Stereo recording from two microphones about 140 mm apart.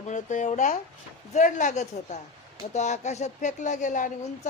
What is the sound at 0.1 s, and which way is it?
Speech, 60° left (ahead or behind).